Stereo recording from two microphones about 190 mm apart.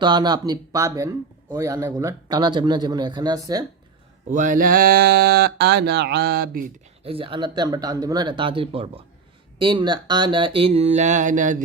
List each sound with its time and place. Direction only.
0.0 s speech: 20° right (ahead or behind)
4.3 s speech: 40° right (ahead or behind)
7.0 s speech: 30° right (ahead or behind)